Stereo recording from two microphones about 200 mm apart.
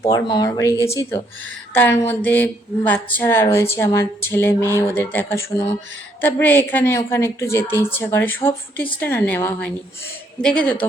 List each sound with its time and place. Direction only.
0.1 s speech: 20° left (ahead or behind); by 10.8 s 5° left (ahead or behind)